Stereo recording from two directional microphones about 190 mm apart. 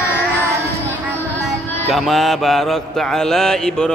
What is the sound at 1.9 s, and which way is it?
Speech, centre (ahead or behind).